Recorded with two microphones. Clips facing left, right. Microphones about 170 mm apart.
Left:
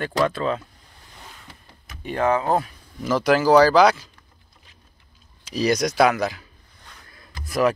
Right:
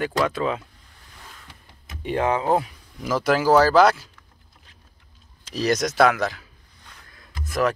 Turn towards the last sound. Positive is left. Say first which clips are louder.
# left 2 dB
turn(degrees=0)  # may be behind; listen again after turning